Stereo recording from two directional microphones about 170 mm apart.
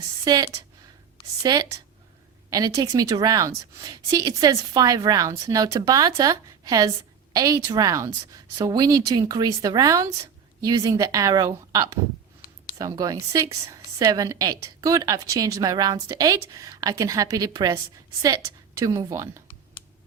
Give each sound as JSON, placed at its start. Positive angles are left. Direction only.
{"t": 0.3, "sound": "a woman's voice", "side_deg": -20}
{"t": 18.8, "sound": "a woman's voice", "side_deg": -20}